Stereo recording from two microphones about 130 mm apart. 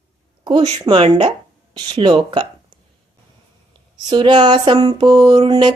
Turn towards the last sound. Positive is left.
turn(degrees=-40)  # may be behind; listen again after turning